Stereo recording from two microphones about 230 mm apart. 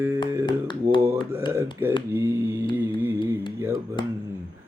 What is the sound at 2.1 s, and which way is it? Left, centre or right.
Mantra, centre.